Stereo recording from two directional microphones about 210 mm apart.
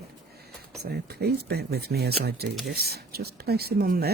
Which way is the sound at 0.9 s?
50° right (ahead or behind).